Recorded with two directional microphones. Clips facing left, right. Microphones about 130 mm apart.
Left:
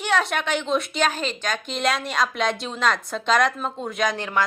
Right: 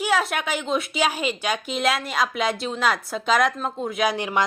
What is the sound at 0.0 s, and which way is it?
A woman's voice, 5° right (ahead or behind).